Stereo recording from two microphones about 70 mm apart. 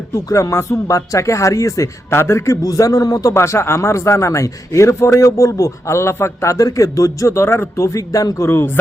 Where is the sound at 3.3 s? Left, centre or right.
Left.